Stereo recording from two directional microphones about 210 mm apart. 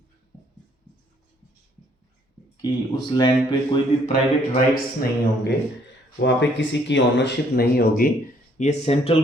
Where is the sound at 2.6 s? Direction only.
20° left (ahead or behind).